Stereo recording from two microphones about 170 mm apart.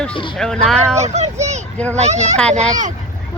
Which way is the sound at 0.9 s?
40° right (ahead or behind).